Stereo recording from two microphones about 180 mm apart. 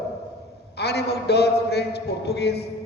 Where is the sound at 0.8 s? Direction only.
65° left (ahead or behind).